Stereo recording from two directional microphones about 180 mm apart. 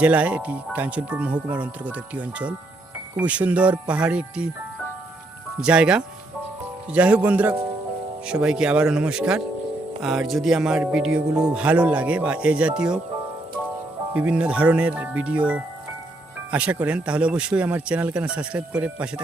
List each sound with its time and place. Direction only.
0.0 s speech: 5° right (ahead or behind)
5.5 s speech: 5° right (ahead or behind)
14.1 s speech: 10° right (ahead or behind)